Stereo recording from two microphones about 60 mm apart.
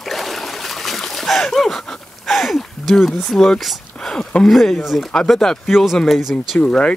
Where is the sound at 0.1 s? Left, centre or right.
Centre.